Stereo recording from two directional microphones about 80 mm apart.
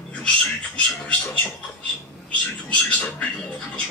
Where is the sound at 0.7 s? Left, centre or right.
Centre.